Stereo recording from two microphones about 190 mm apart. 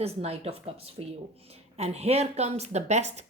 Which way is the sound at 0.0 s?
35° right (ahead or behind).